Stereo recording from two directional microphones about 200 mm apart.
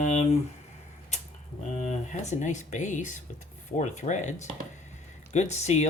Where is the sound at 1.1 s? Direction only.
35° left (ahead or behind).